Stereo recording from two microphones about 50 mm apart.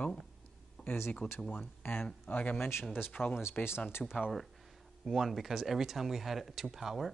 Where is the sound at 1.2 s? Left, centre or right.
Left.